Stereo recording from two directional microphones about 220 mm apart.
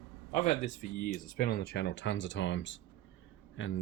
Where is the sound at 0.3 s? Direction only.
30° left (ahead or behind).